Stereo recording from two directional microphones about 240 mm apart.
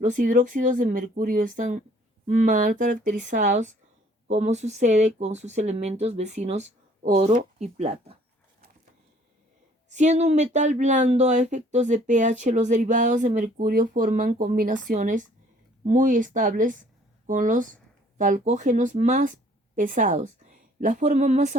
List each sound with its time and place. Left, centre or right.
0.0 s speech: right
9.9 s a woman's voice: right